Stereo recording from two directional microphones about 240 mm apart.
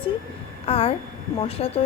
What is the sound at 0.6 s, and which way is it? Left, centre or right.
Speech, left.